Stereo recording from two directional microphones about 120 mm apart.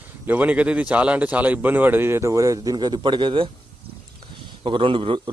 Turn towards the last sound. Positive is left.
turn(degrees=-45)  # may be behind; listen again after turning